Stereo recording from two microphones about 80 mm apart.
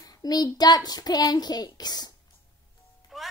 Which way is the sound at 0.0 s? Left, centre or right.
Left.